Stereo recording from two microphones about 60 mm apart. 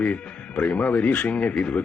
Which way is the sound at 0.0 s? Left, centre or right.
Left.